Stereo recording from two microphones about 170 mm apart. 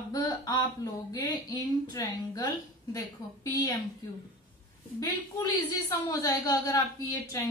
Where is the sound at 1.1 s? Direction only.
20° left (ahead or behind).